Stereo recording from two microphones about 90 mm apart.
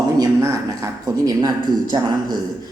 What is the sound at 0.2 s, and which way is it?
A man's voice, 35° right (ahead or behind).